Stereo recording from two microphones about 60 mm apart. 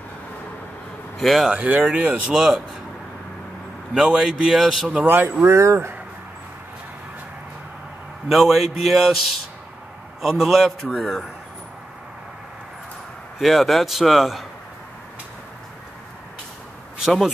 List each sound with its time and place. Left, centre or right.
1.1 s a man's voice: centre
1.5 s speech: right
2.3 s speech: centre
3.9 s speech: centre
5.0 s speech: right
5.4 s speech: right
8.3 s speech: centre
10.2 s speech: centre
13.4 s speech: centre